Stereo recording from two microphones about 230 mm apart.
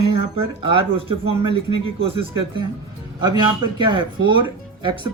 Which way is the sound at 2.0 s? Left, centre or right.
Right.